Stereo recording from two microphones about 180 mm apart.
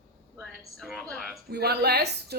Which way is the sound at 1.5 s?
60° right (ahead or behind).